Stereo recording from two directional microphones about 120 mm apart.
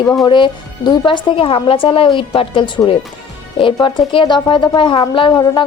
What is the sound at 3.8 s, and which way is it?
Speech, 45° left (ahead or behind).